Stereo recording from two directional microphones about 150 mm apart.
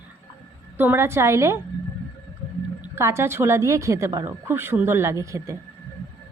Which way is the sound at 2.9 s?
15° right (ahead or behind).